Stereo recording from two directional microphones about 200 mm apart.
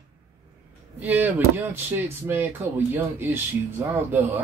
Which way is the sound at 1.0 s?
10° right (ahead or behind).